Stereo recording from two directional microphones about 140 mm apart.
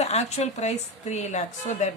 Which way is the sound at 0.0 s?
50° left (ahead or behind).